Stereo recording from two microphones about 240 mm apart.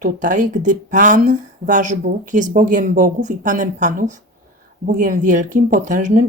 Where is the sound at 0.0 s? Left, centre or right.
Right.